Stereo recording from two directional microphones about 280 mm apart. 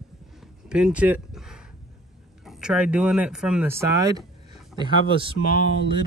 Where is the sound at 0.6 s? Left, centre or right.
Centre.